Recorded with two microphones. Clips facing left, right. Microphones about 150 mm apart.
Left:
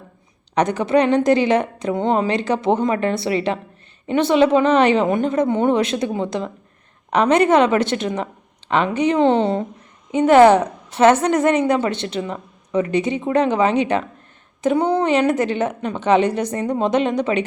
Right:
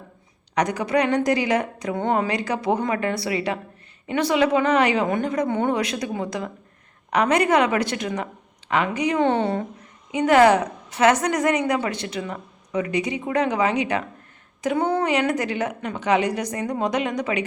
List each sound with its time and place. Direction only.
0.5 s a woman's voice: 25° left (ahead or behind)